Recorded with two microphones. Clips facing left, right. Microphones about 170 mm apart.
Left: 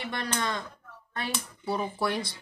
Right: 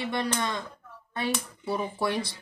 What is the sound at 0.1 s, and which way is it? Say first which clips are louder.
Speech: even; 20° right (ahead or behind).